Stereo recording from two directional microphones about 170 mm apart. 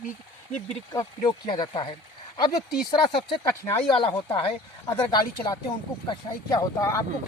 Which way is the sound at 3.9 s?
30° left (ahead or behind).